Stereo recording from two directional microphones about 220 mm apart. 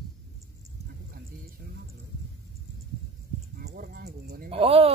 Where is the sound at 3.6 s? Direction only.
45° right (ahead or behind).